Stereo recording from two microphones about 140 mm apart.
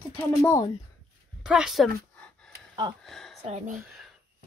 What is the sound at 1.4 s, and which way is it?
Speech, 5° right (ahead or behind).